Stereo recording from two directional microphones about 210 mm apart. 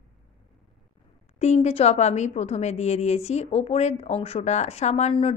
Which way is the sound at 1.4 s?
30° left (ahead or behind).